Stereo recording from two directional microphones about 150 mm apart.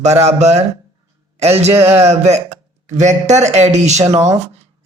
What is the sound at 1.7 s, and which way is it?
Speech, 15° right (ahead or behind).